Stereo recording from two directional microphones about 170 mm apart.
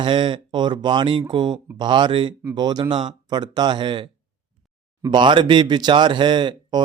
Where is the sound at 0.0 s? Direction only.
30° right (ahead or behind).